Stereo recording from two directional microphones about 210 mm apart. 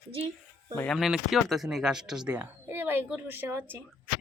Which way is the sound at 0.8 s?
Centre (ahead or behind).